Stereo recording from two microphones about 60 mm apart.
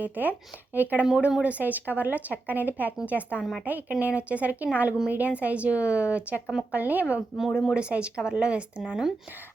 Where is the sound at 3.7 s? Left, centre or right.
Right; by 9.3 s centre.